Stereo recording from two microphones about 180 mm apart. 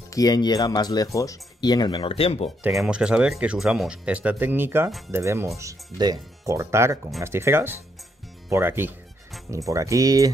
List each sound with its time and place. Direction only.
0.1 s speech: 20° left (ahead or behind)
2.7 s speech: 5° right (ahead or behind); by 10.3 s 20° right (ahead or behind)